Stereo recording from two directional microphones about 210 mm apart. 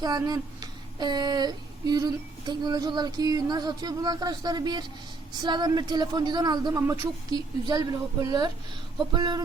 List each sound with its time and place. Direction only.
0.0 s a woman's voice: 20° right (ahead or behind)